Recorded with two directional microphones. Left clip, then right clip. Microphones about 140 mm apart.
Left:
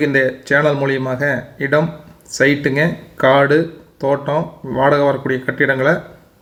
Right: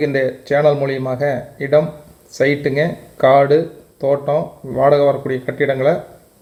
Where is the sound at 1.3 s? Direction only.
10° right (ahead or behind).